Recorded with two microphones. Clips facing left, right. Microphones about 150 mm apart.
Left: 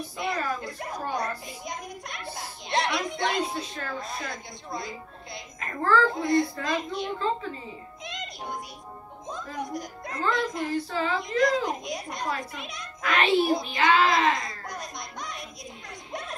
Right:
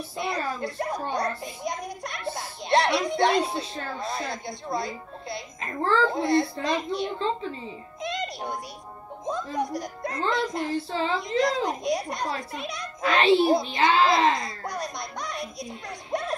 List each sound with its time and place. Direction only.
0.2 s a child's voice: 35° right (ahead or behind)
8.0 s music: 35° right (ahead or behind)
9.5 s a child's voice: 35° right (ahead or behind)